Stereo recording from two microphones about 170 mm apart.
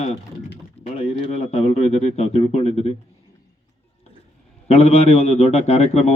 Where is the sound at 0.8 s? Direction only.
40° left (ahead or behind).